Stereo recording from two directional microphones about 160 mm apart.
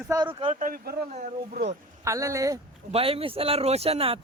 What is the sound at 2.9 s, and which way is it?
Speech, 35° right (ahead or behind).